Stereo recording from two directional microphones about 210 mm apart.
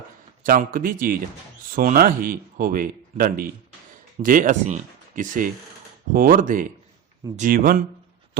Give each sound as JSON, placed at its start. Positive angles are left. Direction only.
{"t": 0.4, "sound": "speech", "side_deg": -40}